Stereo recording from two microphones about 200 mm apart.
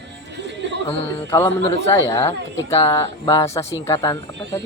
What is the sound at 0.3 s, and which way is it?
Music, 60° right (ahead or behind).